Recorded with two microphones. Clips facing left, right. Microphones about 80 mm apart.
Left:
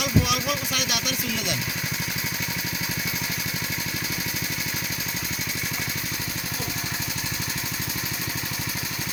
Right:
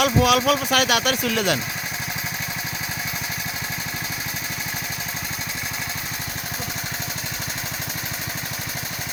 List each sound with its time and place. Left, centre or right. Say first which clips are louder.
0.0 s speech: right 7 dB; right